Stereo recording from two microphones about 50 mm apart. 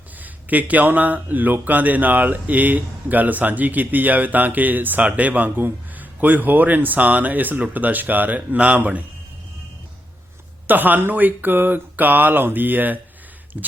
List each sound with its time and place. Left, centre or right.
0.2 s speech: right
10.7 s speech: right
13.5 s a sound: right